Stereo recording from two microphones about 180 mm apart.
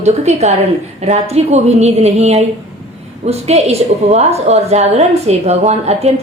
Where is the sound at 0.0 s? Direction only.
40° right (ahead or behind).